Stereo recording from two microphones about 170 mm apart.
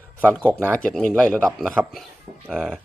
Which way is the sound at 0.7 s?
5° left (ahead or behind).